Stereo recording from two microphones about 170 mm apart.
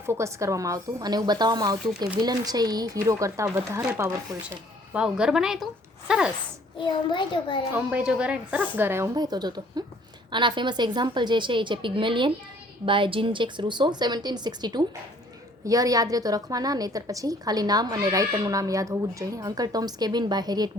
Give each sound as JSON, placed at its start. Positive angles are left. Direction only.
{"t": 0.0, "sound": "a woman's voice", "side_deg": -15}
{"t": 4.9, "sound": "a woman's voice", "side_deg": -5}
{"t": 6.7, "sound": "a child's voice", "side_deg": 30}
{"t": 7.7, "sound": "a woman's voice", "side_deg": -10}
{"t": 9.1, "sound": "a woman's voice", "side_deg": -25}